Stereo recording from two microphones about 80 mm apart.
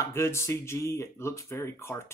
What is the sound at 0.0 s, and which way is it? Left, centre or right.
Speech, left.